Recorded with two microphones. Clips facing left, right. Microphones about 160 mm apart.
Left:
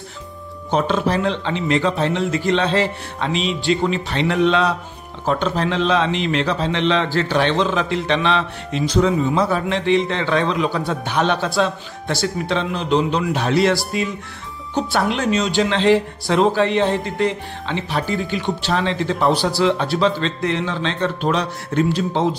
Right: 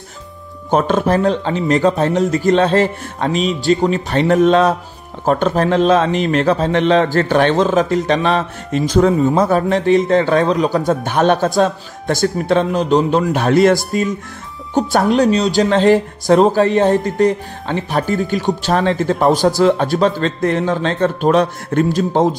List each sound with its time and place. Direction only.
0.7 s a man's voice: 50° right (ahead or behind)